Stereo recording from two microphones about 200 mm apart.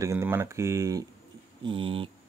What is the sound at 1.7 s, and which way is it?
Speech, 25° right (ahead or behind).